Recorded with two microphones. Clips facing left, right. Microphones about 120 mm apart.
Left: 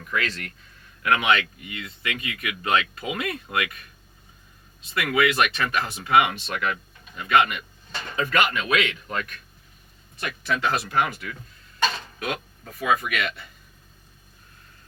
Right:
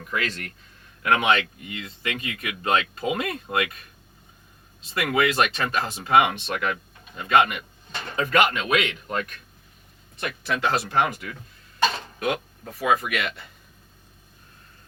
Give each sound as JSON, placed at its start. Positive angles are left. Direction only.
{"t": 0.0, "sound": "speech", "side_deg": -30}
{"t": 4.9, "sound": "speech", "side_deg": -30}
{"t": 10.6, "sound": "speech", "side_deg": -25}
{"t": 12.8, "sound": "speech", "side_deg": -5}